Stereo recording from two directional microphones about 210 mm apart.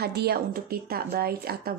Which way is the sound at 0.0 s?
50° right (ahead or behind).